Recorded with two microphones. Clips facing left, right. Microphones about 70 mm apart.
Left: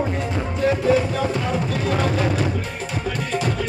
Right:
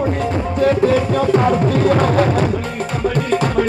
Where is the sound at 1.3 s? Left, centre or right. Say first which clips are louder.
Right 9 dB; right.